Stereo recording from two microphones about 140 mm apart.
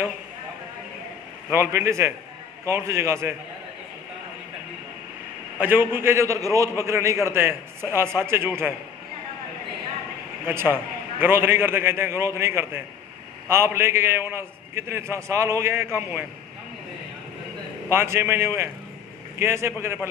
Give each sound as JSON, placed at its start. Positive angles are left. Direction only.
{"t": 1.5, "sound": "a man's voice", "side_deg": -20}
{"t": 5.6, "sound": "a man's voice", "side_deg": -15}
{"t": 10.5, "sound": "a man's voice", "side_deg": -15}
{"t": 17.8, "sound": "a man's voice", "side_deg": -20}